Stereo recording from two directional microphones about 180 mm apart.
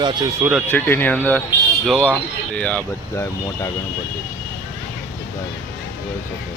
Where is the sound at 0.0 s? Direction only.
25° right (ahead or behind).